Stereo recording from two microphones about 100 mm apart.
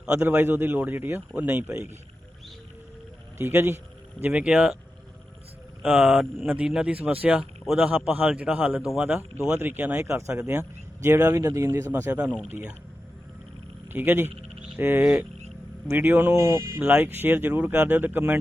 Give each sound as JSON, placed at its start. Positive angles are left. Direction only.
{"t": 0.2, "sound": "speech", "side_deg": -20}
{"t": 3.3, "sound": "speech", "side_deg": -25}
{"t": 4.2, "sound": "speech", "side_deg": -10}
{"t": 5.8, "sound": "mantra", "side_deg": -5}
{"t": 6.5, "sound": "speech", "side_deg": -10}
{"t": 7.6, "sound": "a man's voice", "side_deg": 0}
{"t": 8.1, "sound": "speech", "side_deg": -15}
{"t": 9.6, "sound": "speech", "side_deg": -20}
{"t": 11.9, "sound": "speech", "side_deg": -20}
{"t": 13.9, "sound": "speech", "side_deg": -20}
{"t": 16.3, "sound": "speech", "side_deg": -35}
{"t": 16.7, "sound": "speech", "side_deg": -20}